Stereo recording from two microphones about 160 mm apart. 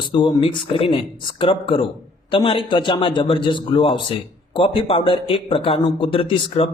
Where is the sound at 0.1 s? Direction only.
30° left (ahead or behind).